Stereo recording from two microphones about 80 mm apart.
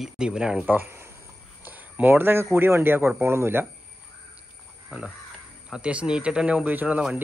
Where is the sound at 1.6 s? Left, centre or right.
Right.